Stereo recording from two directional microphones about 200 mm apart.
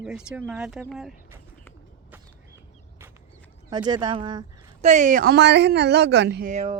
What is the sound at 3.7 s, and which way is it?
Speech, 20° right (ahead or behind).